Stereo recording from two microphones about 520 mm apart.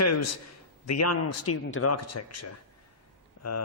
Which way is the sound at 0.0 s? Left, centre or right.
Left.